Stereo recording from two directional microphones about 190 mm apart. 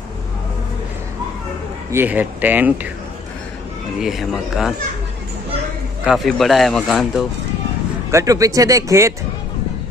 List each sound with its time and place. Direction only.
1.9 s speech: 10° right (ahead or behind)
4.0 s speech: centre (ahead or behind)
6.0 s speech: centre (ahead or behind)
8.1 s speech: 15° right (ahead or behind)